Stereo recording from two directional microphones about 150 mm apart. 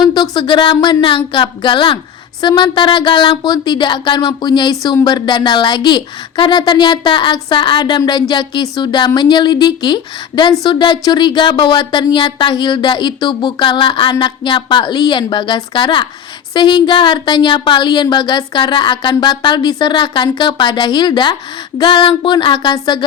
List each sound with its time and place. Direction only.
0.0 s speech: 30° left (ahead or behind)